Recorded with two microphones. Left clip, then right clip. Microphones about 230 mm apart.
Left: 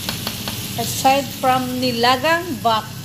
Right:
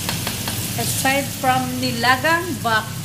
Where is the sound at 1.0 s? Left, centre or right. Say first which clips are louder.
Left 3 dB; centre.